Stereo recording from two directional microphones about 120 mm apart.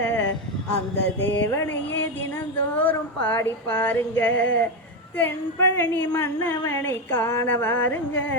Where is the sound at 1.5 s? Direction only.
20° left (ahead or behind).